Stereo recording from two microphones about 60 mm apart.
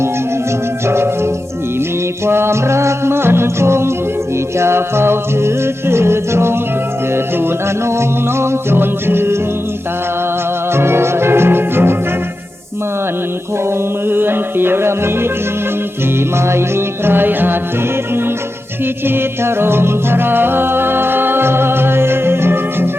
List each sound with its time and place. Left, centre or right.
0.9 s music: right
10.7 s music: right
13.7 s music: right
16.5 s music: right
19.0 s music: right